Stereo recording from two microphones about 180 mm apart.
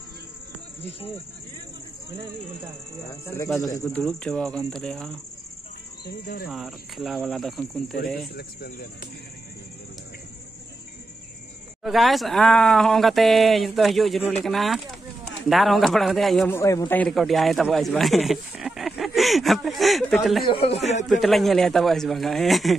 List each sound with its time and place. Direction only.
3.8 s speech: centre (ahead or behind)
6.0 s speech: 60° left (ahead or behind)
6.5 s speech: centre (ahead or behind)
8.3 s speech: 55° left (ahead or behind)
11.8 s speech: centre (ahead or behind)
16.4 s a man's voice: 15° left (ahead or behind)
17.1 s speech: centre (ahead or behind)
20.4 s speech: 30° left (ahead or behind)
21.1 s speech: centre (ahead or behind)